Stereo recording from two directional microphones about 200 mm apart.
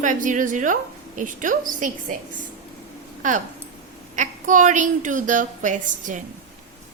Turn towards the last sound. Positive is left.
turn(degrees=-40)  # may be behind; listen again after turning